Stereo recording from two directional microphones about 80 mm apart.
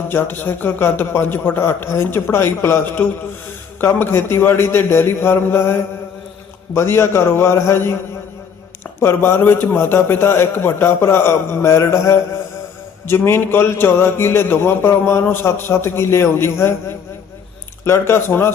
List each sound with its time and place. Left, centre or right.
0.1 s a man's voice: left
9.0 s a man's voice: left
17.8 s a man's voice: left